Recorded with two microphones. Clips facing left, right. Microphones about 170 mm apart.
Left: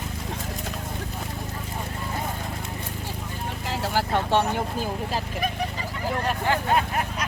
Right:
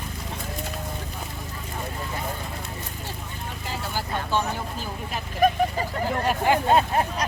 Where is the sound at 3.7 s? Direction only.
80° left.